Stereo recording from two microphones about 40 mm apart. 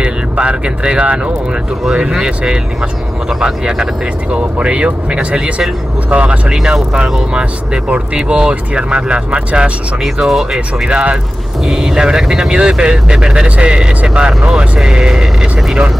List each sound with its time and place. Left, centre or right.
0.0 s speech: right
1.9 s speech: centre; by 6.4 s right
6.7 s speech: right
10.2 s speech: centre
10.9 s speech: right
11.6 s speech: centre
12.5 s speech: right